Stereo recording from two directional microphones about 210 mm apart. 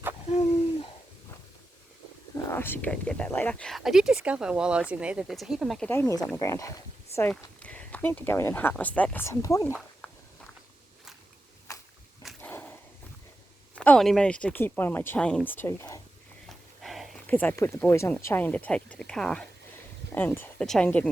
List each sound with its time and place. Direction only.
2.3 s whispering: 10° left (ahead or behind)
2.8 s speech: 5° left (ahead or behind)
5.9 s speech: 15° left (ahead or behind)
9.7 s a sound: centre (ahead or behind)
11.7 s a sound: 15° left (ahead or behind)
12.2 s dog: 5° left (ahead or behind)
13.7 s speech: 5° left (ahead or behind)
16.5 s speech: centre (ahead or behind)